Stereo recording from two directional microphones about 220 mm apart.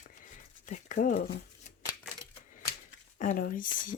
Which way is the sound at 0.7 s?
35° left (ahead or behind).